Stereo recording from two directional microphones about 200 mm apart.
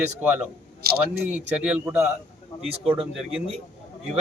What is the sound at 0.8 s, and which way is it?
Speech, 50° right (ahead or behind).